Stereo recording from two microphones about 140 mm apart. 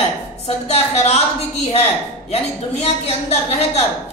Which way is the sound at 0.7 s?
50° left (ahead or behind).